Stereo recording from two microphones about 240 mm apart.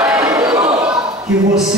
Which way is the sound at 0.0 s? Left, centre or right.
Centre.